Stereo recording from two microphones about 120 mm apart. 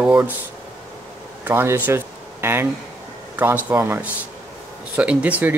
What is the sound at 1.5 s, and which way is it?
Speech, 20° right (ahead or behind).